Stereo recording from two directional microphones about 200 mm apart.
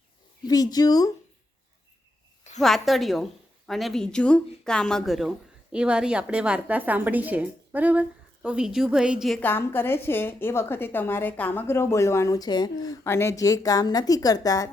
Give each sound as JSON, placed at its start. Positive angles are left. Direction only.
{"t": 0.4, "sound": "speech", "side_deg": 20}
{"t": 2.6, "sound": "a woman's voice", "side_deg": 0}